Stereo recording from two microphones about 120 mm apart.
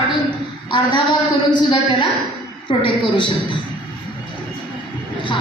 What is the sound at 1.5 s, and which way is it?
A woman's voice, 40° left (ahead or behind).